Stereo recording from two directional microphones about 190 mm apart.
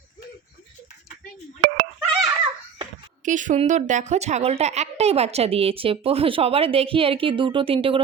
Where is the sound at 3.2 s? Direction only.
40° right (ahead or behind).